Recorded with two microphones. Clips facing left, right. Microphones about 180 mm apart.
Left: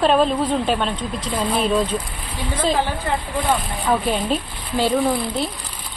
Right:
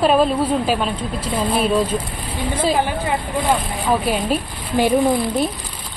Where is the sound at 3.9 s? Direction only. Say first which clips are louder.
Right 1 dB; 10° right (ahead or behind).